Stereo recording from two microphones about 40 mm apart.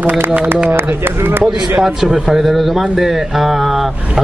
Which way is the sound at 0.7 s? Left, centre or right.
Right.